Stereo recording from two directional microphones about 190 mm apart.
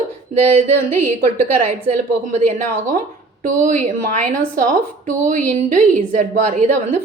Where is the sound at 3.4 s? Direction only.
45° right (ahead or behind).